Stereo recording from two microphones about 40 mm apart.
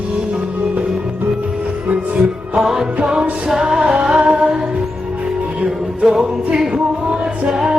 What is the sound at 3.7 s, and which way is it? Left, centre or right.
Music, right.